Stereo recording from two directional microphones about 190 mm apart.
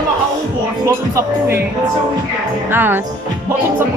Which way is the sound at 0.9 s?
15° right (ahead or behind).